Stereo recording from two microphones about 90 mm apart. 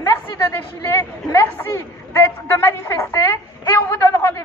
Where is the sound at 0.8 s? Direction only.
30° left (ahead or behind).